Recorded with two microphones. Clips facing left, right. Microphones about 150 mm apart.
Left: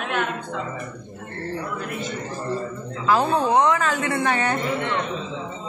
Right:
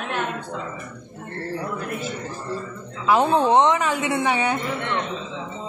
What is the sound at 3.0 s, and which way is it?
A woman's voice, 20° right (ahead or behind).